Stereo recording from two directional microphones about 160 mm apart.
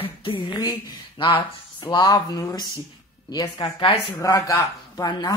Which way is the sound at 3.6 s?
35° left (ahead or behind).